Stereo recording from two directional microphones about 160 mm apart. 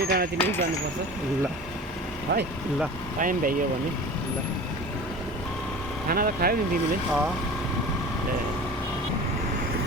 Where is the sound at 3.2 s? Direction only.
55° right (ahead or behind).